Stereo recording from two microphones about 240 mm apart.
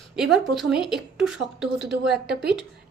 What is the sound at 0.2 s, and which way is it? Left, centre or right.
A woman's voice, centre.